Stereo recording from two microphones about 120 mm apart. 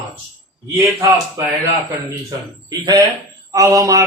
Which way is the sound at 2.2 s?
30° right (ahead or behind).